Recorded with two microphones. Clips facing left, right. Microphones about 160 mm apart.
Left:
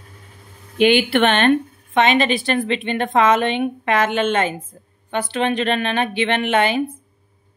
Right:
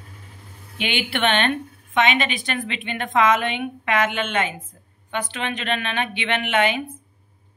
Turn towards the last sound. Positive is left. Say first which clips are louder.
# left 3 dB
turn(degrees=35)  # may be behind; listen again after turning